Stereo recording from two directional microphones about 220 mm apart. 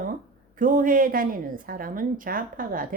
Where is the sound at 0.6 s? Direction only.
40° right (ahead or behind).